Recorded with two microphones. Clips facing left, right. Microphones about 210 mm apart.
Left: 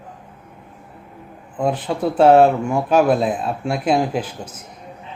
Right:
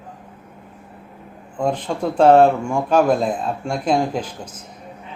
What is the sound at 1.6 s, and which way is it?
Speech, 5° left (ahead or behind).